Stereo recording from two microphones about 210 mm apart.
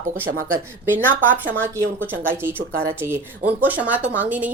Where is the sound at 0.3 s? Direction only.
40° right (ahead or behind).